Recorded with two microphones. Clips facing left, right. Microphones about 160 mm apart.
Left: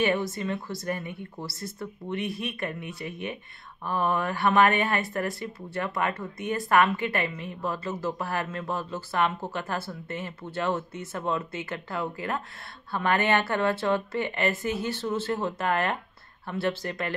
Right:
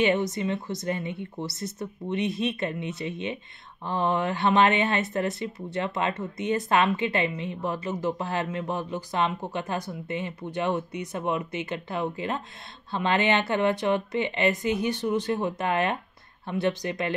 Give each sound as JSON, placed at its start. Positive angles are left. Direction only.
{"t": 0.0, "sound": "speech", "side_deg": -20}